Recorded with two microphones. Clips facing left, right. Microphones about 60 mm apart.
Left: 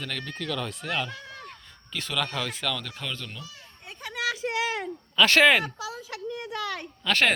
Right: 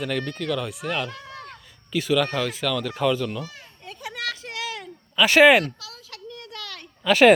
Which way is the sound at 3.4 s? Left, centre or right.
Right.